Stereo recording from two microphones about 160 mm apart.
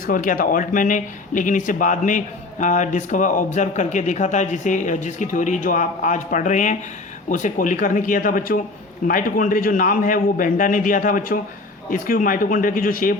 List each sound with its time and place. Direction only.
0.0 s a man's voice: 60° left (ahead or behind)